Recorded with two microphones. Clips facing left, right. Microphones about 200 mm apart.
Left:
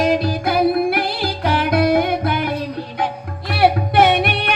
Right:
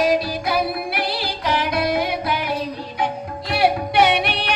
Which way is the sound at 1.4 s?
55° left (ahead or behind).